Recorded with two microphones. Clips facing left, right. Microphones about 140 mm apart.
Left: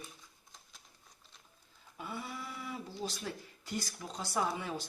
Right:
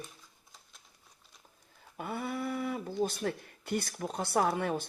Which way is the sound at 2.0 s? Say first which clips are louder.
Right 7 dB; 55° right (ahead or behind).